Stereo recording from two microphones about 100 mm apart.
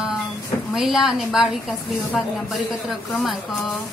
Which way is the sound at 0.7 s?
5° right (ahead or behind).